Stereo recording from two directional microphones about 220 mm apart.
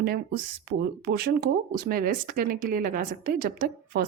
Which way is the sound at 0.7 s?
45° right (ahead or behind).